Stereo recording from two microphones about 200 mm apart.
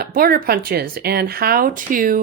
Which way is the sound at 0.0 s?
45° right (ahead or behind).